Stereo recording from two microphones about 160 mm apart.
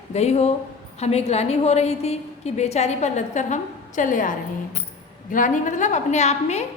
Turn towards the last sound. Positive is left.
turn(degrees=45)  # may be behind; listen again after turning